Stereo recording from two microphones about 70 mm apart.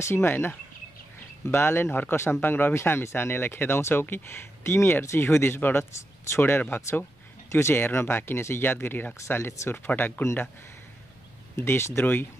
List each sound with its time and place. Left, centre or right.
0.0 s speech: left
9.4 s speech: left
9.8 s speech: left
11.5 s speech: left